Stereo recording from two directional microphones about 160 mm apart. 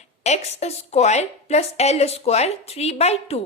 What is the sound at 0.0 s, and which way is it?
A woman's voice, 45° left (ahead or behind).